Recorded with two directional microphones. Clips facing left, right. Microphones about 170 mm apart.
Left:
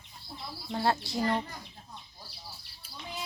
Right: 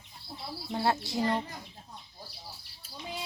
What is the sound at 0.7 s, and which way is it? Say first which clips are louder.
Speech: even; 20° right (ahead or behind).